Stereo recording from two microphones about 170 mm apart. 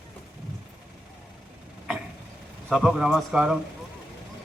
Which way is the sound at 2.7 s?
5° right (ahead or behind).